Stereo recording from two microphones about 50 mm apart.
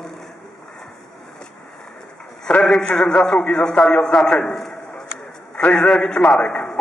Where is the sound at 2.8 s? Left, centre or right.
Centre.